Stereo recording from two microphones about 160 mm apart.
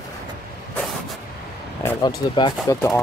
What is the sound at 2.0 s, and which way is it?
Speech, 30° left (ahead or behind).